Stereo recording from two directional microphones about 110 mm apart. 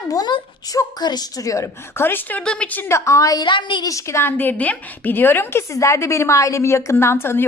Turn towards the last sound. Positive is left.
turn(degrees=20)  # may be behind; listen again after turning